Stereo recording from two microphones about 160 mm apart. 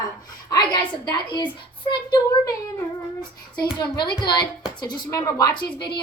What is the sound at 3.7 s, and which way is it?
A woman's voice, 25° left (ahead or behind).